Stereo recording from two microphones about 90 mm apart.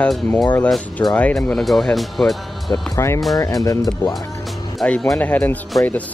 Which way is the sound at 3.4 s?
40° left (ahead or behind).